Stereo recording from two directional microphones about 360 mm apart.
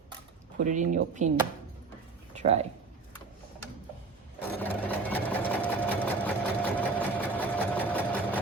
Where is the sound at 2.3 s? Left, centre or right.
Centre.